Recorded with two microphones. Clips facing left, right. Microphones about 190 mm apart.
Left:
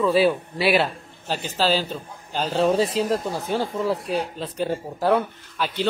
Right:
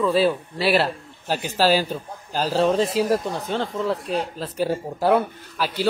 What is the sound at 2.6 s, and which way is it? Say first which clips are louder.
Speech: even; centre (ahead or behind).